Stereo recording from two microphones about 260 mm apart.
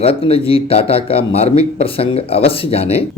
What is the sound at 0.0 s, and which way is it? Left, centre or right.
Speech, left.